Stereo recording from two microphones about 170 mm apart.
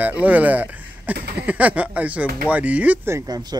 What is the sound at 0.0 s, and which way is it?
Speech, 10° right (ahead or behind).